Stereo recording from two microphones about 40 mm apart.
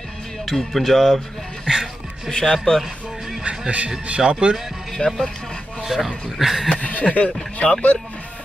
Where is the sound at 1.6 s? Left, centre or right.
Centre.